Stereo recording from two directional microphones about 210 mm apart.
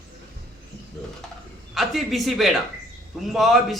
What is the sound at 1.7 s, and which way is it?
A man's voice, centre (ahead or behind).